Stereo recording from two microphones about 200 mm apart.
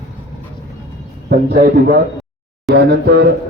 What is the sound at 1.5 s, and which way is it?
A man's voice, 50° right (ahead or behind).